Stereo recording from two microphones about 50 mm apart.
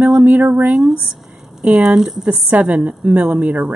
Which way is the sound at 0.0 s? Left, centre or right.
Right.